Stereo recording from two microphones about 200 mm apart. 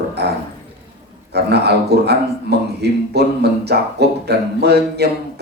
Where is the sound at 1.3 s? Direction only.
55° right (ahead or behind).